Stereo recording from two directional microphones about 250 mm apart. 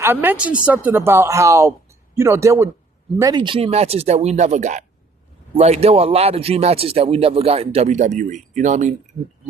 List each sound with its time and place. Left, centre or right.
0.0 s a woman's voice: centre; by 8.9 s right